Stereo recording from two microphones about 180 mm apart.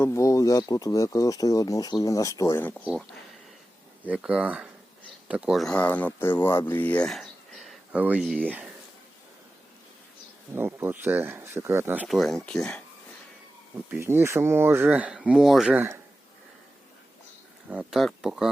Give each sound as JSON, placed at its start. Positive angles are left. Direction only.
{"t": 0.0, "sound": "speech", "side_deg": 15}
{"t": 2.8, "sound": "speech", "side_deg": 0}
{"t": 10.5, "sound": "speech", "side_deg": -10}
{"t": 12.0, "sound": "speech", "side_deg": 0}
{"t": 13.7, "sound": "speech", "side_deg": -10}
{"t": 17.7, "sound": "speech", "side_deg": -5}